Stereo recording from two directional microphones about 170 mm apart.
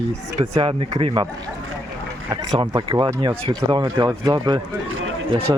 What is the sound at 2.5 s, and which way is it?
Speech, 25° right (ahead or behind).